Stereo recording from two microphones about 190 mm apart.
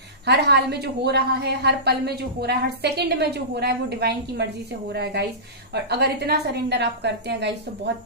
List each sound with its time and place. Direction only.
0.3 s a woman's voice: 60° right (ahead or behind)